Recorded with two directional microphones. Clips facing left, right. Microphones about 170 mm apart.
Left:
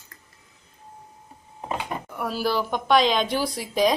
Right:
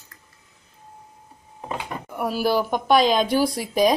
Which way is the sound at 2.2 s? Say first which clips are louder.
Right 4 dB; 10° right (ahead or behind).